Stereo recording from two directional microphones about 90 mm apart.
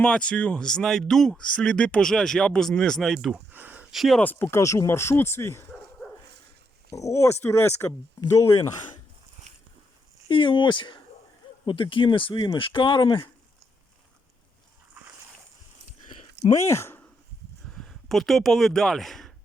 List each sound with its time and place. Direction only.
0.0 s speech: 15° left (ahead or behind)
3.3 s a sound: 20° right (ahead or behind)
3.9 s speech: centre (ahead or behind)
4.2 s speech: 20° left (ahead or behind)
6.9 s speech: 35° left (ahead or behind)
10.2 s speech: 65° left (ahead or behind)
16.5 s speech: 35° left (ahead or behind)
17.7 s speech: 5° left (ahead or behind)